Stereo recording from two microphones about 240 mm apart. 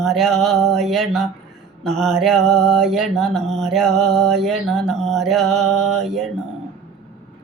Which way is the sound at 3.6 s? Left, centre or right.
Centre.